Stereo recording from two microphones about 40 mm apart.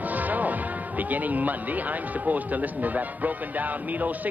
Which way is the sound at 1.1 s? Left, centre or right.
Right.